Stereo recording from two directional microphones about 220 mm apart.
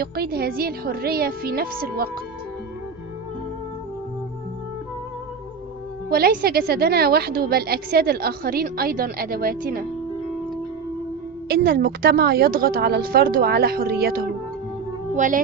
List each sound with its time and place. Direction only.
0.0 s a woman's voice: 45° right (ahead or behind)
6.1 s a woman's voice: 45° right (ahead or behind)
11.4 s a woman's voice: 45° right (ahead or behind)
15.1 s child singing: 35° right (ahead or behind)